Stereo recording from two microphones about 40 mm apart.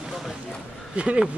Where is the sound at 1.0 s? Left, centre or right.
Right.